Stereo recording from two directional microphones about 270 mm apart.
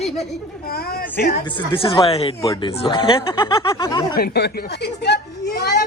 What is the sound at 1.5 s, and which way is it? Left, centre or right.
Speech, centre.